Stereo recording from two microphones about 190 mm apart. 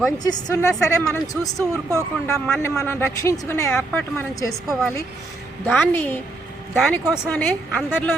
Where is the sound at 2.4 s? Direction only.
5° left (ahead or behind).